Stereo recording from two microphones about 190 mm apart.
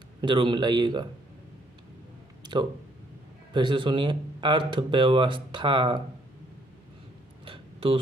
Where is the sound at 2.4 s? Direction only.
25° right (ahead or behind).